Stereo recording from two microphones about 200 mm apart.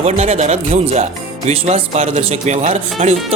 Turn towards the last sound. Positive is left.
turn(degrees=-35)  # may be behind; listen again after turning